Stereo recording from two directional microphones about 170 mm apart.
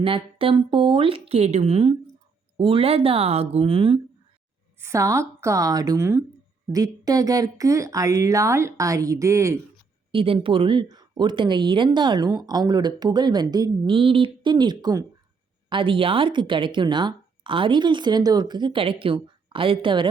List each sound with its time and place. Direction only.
0.0 s a woman's voice: 30° right (ahead or behind)
4.8 s a woman's voice: 15° right (ahead or behind)
10.1 s speech: 30° right (ahead or behind)